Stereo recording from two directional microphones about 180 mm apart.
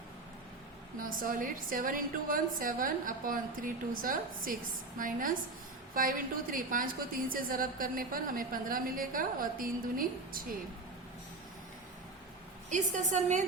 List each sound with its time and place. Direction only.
0.9 s a woman's voice: 50° right (ahead or behind)
12.7 s a woman's voice: 45° right (ahead or behind)